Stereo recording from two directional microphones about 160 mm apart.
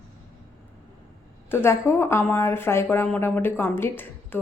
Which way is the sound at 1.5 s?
15° left (ahead or behind).